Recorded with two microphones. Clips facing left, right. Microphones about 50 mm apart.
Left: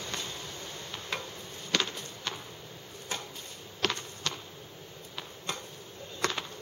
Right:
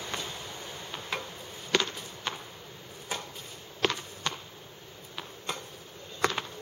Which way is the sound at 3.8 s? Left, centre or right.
Centre.